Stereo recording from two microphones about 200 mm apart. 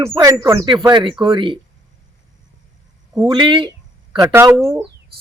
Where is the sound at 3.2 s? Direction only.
25° right (ahead or behind).